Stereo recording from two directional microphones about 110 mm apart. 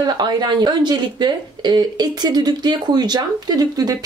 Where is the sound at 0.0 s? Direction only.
40° right (ahead or behind).